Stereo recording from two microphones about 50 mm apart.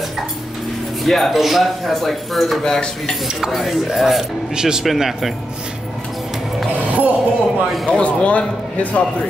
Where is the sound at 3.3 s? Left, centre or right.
Centre.